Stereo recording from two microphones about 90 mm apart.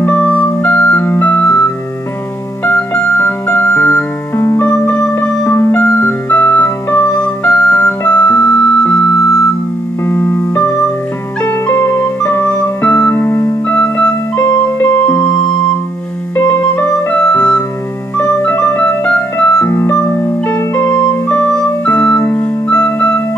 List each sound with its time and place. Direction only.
0.0 s music: 20° left (ahead or behind)
10.0 s music: 30° left (ahead or behind)
12.9 s keyboard: 20° left (ahead or behind)
14.5 s music: 30° left (ahead or behind)
16.3 s music: 25° left (ahead or behind)
19.6 s keyboard: 25° left (ahead or behind)
21.1 s music: 20° left (ahead or behind)